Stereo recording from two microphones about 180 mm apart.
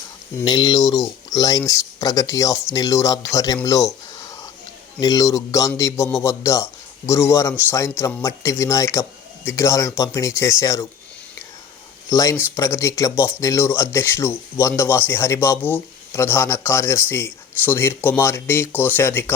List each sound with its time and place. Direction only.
0.3 s speech: 25° left (ahead or behind)
4.9 s speech: 20° left (ahead or behind)
12.0 s speech: 15° left (ahead or behind)